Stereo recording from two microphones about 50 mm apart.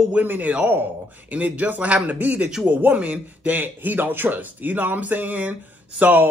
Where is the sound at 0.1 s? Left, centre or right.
Right.